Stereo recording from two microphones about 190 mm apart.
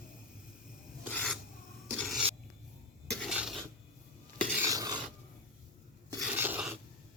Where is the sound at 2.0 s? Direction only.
Centre (ahead or behind).